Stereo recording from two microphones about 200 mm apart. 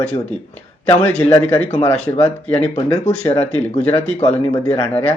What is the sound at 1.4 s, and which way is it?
Speech, 5° left (ahead or behind).